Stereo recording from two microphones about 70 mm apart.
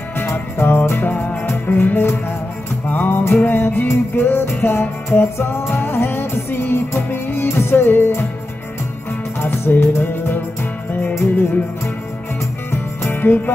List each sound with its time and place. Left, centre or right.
0.2 s music: left
9.4 s music: left
11.1 s music: left
13.0 s music: left